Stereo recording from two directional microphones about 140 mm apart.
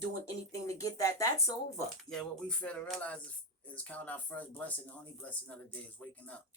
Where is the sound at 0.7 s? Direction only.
25° left (ahead or behind).